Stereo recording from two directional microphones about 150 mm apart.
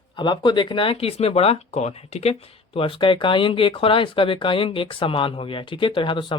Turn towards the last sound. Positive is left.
turn(degrees=35)  # may be behind; listen again after turning